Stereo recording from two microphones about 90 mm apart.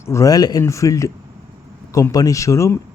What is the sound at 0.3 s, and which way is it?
Speech, 45° left (ahead or behind).